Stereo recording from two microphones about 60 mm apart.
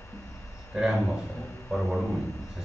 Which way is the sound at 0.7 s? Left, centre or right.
Centre.